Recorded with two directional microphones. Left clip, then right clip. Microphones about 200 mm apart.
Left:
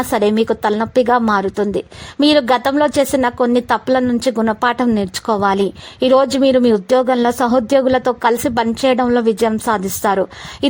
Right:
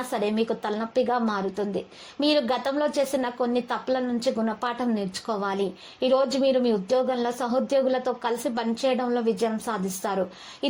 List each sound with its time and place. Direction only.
0.1 s a woman's voice: 50° left (ahead or behind)